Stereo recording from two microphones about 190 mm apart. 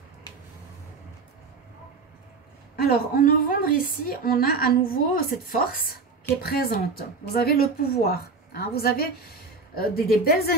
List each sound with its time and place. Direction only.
2.7 s a woman's voice: 50° left (ahead or behind)